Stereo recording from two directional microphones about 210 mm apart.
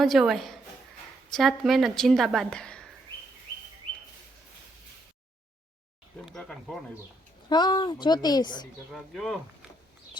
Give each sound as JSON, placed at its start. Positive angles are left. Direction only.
{"t": 0.0, "sound": "a woman's voice", "side_deg": 0}
{"t": 6.2, "sound": "a woman's voice", "side_deg": 0}
{"t": 7.5, "sound": "speech", "side_deg": 20}
{"t": 8.9, "sound": "a woman's voice", "side_deg": 0}